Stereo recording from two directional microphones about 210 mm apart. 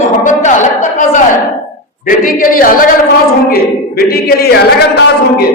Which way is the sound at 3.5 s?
45° left (ahead or behind).